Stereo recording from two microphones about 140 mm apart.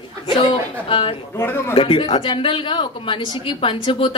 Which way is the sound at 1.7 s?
40° left (ahead or behind).